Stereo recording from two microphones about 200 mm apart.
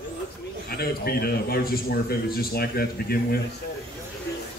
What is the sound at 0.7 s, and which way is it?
A man's voice, 50° left (ahead or behind).